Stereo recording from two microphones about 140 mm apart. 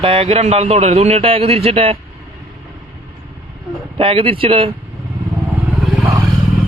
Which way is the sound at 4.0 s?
40° right (ahead or behind).